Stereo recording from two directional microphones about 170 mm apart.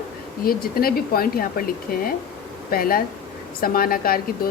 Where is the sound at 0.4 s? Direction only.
60° left (ahead or behind).